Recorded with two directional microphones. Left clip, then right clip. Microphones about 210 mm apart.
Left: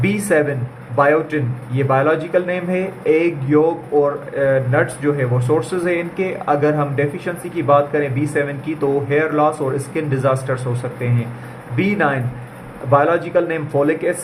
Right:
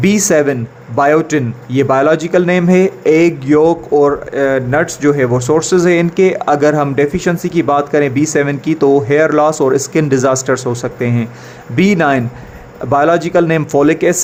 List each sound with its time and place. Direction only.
0.0 s a man's voice: 50° right (ahead or behind)